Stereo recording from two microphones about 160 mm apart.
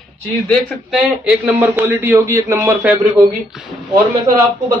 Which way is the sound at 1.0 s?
5° right (ahead or behind).